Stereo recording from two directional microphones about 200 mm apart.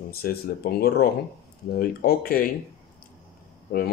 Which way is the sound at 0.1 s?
50° left (ahead or behind).